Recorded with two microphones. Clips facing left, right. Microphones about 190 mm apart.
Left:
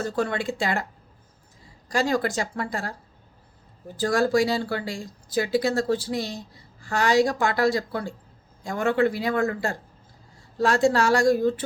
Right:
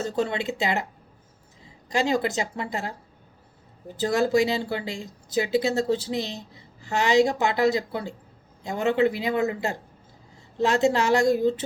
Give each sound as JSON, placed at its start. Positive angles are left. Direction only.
{"t": 0.0, "sound": "a woman's voice", "side_deg": -20}